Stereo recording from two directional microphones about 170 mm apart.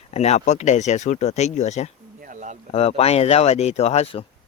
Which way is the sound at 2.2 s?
45° right (ahead or behind).